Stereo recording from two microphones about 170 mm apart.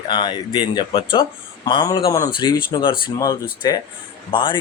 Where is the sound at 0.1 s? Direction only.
25° left (ahead or behind).